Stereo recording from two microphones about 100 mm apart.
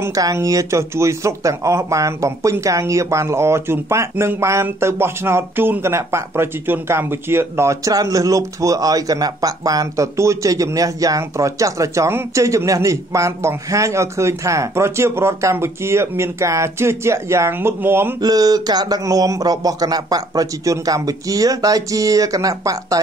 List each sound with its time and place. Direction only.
0.1 s speech: 35° right (ahead or behind)
18.2 s a man's voice: 40° right (ahead or behind)